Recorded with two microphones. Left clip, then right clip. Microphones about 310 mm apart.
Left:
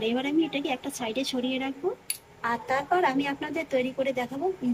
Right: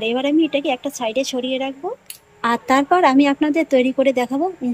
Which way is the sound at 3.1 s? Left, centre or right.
Right.